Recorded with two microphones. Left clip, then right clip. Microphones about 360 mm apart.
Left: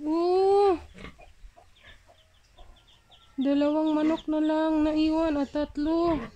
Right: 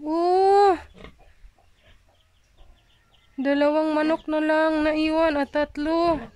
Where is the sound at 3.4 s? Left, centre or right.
Right.